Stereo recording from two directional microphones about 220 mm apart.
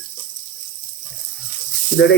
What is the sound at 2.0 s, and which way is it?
Speech, 55° left (ahead or behind).